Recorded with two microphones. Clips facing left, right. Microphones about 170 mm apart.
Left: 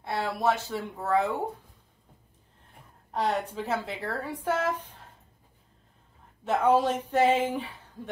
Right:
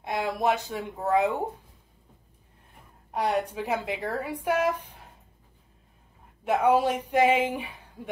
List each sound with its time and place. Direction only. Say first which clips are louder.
0.0 s speech: right 1 dB; 15° right (ahead or behind)
3.1 s a woman's voice: right 2 dB; 10° right (ahead or behind)
6.4 s a woman's voice: right 1 dB; 10° right (ahead or behind)